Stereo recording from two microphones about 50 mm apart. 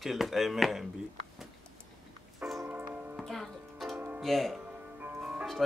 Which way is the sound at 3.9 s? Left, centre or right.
Right.